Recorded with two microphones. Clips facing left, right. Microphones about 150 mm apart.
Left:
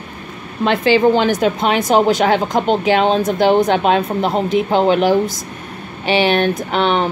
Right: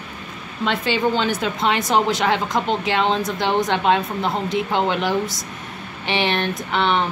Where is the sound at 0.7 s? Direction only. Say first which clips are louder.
Left 8 dB; 45° left (ahead or behind).